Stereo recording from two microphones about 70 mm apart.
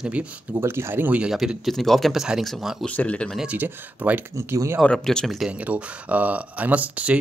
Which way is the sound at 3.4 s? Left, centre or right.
Right.